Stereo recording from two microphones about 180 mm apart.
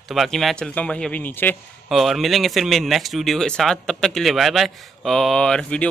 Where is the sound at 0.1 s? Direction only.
Centre (ahead or behind).